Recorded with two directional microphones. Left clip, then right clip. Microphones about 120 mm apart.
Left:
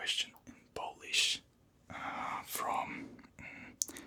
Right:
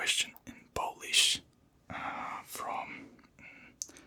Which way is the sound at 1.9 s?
15° right (ahead or behind).